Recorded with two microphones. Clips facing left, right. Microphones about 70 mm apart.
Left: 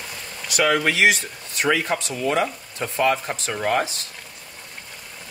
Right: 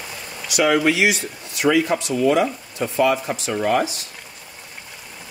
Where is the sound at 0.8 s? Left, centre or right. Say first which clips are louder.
Right 1 dB; left.